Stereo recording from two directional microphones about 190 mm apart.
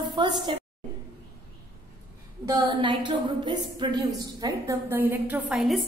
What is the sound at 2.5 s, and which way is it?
A woman's voice, 25° right (ahead or behind).